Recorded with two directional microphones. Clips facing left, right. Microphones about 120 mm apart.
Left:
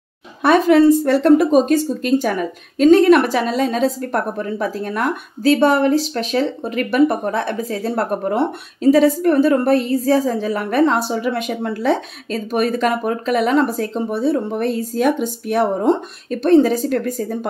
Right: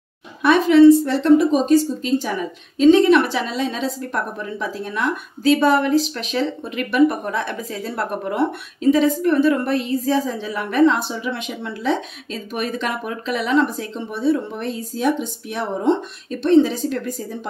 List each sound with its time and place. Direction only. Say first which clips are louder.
0.4 s a woman's voice: even; 45° left (ahead or behind)